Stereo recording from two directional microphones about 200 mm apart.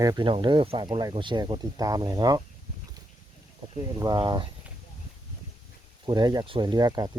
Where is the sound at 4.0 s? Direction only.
20° right (ahead or behind).